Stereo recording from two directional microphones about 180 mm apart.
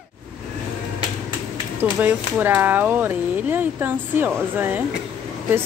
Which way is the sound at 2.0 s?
10° right (ahead or behind).